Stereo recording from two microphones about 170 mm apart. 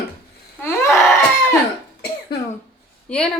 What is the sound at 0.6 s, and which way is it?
Speech, 15° left (ahead or behind).